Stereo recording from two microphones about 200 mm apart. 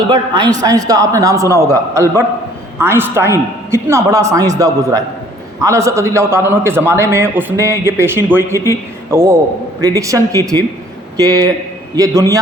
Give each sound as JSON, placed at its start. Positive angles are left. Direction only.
{"t": 0.1, "sound": "a man's voice", "side_deg": -20}
{"t": 8.5, "sound": "a man's voice", "side_deg": 15}
{"t": 9.0, "sound": "a man's voice", "side_deg": -15}